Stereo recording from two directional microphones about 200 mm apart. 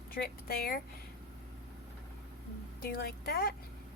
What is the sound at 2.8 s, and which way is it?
Speech, 50° left (ahead or behind).